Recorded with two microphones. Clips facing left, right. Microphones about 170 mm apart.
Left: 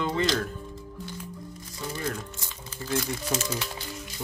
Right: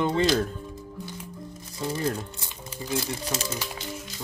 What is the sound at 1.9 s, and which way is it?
Speech, 30° right (ahead or behind).